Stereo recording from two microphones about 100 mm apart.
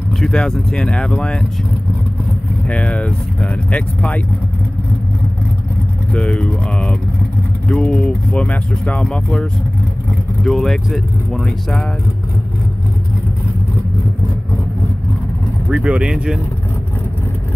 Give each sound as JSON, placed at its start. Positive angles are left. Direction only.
{"t": 0.1, "sound": "speech", "side_deg": 5}
{"t": 2.7, "sound": "speech", "side_deg": 10}
{"t": 6.1, "sound": "speech", "side_deg": 15}
{"t": 15.7, "sound": "speech", "side_deg": -10}